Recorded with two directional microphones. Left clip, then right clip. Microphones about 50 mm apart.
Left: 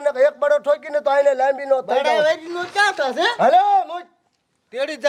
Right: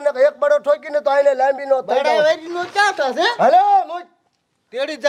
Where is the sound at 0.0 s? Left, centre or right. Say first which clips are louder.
Right 2 dB; left.